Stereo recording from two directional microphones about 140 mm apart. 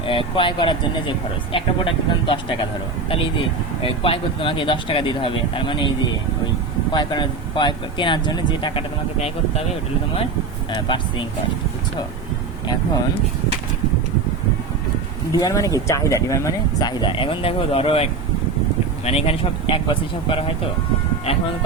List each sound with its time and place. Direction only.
0.0 s speech: 40° left (ahead or behind)
3.8 s speech: 40° left (ahead or behind)
6.9 s speech: 35° left (ahead or behind)
10.8 s speech: 35° left (ahead or behind)
15.3 s speech: 25° left (ahead or behind); by 18.0 s 45° left (ahead or behind)
19.0 s speech: 45° left (ahead or behind)